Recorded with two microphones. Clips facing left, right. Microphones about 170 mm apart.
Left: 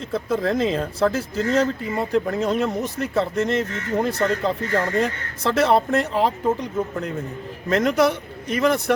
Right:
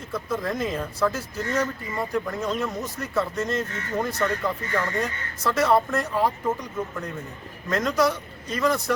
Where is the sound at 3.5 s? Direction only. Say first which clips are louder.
Left 5 dB; 75° left (ahead or behind).